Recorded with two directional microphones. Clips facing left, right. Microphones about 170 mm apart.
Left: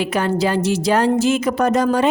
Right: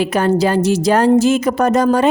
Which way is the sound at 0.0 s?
40° right (ahead or behind).